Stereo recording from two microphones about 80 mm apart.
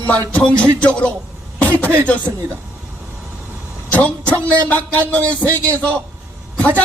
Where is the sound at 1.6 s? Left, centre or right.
Centre.